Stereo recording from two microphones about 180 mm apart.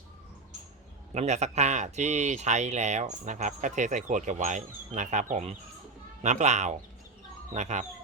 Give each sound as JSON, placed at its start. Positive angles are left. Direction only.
{"t": 1.1, "sound": "speech", "side_deg": -40}